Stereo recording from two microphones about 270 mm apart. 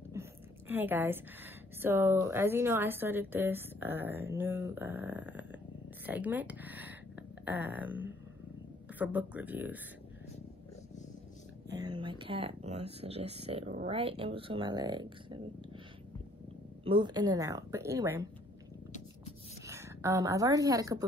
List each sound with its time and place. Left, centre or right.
0.1 s a woman's voice: centre
11.7 s speech: centre
16.8 s a woman's voice: centre
19.6 s speech: centre